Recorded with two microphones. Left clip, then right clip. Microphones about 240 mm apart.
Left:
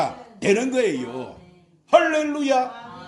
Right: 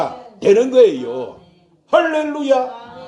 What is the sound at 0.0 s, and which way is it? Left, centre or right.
A man's voice, left.